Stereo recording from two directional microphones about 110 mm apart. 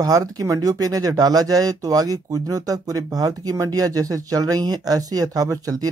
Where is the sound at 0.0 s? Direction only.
35° right (ahead or behind).